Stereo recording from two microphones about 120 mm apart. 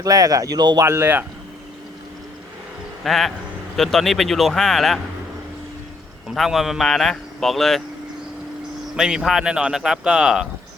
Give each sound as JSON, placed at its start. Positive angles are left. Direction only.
{"t": 0.0, "sound": "speech", "side_deg": -30}
{"t": 0.9, "sound": "speech", "side_deg": -20}
{"t": 3.0, "sound": "speech", "side_deg": 0}
{"t": 6.2, "sound": "speech", "side_deg": 0}
{"t": 9.0, "sound": "speech", "side_deg": -5}